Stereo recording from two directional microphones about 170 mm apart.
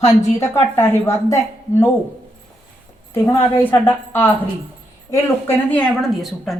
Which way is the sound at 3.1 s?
15° left (ahead or behind).